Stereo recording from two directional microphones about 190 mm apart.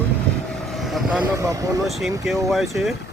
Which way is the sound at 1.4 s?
15° right (ahead or behind).